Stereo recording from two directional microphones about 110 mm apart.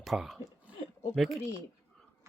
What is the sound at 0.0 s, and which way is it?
Speech, centre (ahead or behind).